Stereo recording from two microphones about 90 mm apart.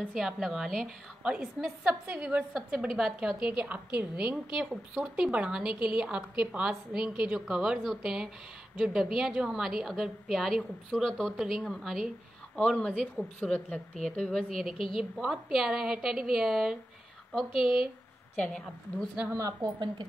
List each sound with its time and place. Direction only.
0.1 s a woman's voice: centre (ahead or behind)
1.2 s a woman's voice: 10° right (ahead or behind)
18.3 s a woman's voice: 10° left (ahead or behind)
19.3 s a woman's voice: 35° right (ahead or behind)